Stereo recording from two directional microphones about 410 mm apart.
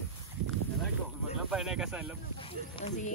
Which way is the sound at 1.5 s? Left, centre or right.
Centre.